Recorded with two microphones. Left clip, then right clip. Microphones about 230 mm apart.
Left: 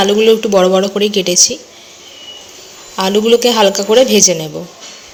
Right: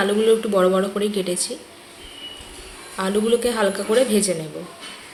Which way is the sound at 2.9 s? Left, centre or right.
Left.